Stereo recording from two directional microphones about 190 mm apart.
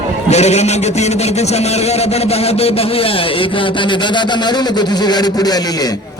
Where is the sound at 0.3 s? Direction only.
35° left (ahead or behind).